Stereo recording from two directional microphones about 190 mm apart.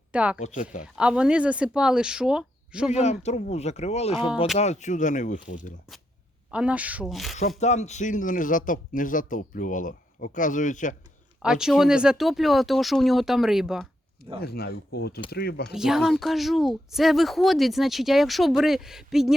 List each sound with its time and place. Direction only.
0.1 s speech: 5° right (ahead or behind)
0.3 s speech: 40° left (ahead or behind)
0.9 s speech: 5° right (ahead or behind)
2.9 s speech: 35° left (ahead or behind)
6.5 s speech: 5° right (ahead or behind)
7.6 s a man's voice: 35° left (ahead or behind)
11.4 s speech: 5° right (ahead or behind)
14.4 s a man's voice: 55° left (ahead or behind)
15.7 s speech: 5° right (ahead or behind)